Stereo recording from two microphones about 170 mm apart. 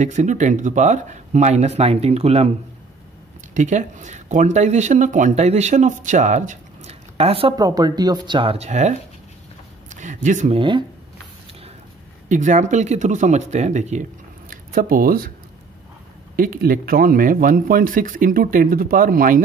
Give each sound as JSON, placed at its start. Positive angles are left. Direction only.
{"t": 0.0, "sound": "speech", "side_deg": -45}
{"t": 3.5, "sound": "speech", "side_deg": -45}
{"t": 7.5, "sound": "speech", "side_deg": -20}
{"t": 9.8, "sound": "a sound", "side_deg": -45}
{"t": 10.6, "sound": "speech", "side_deg": -30}
{"t": 12.3, "sound": "speech", "side_deg": -45}
{"t": 14.5, "sound": "speech", "side_deg": -55}
{"t": 16.3, "sound": "speech", "side_deg": -55}